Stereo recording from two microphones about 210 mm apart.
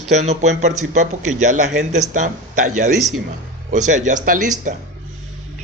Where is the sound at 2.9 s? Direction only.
Centre (ahead or behind).